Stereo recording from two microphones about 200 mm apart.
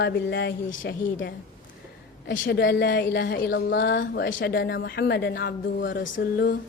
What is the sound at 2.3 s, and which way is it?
A woman's voice, 60° left (ahead or behind).